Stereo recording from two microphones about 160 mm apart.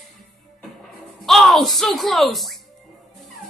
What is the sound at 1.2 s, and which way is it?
Speech, centre (ahead or behind).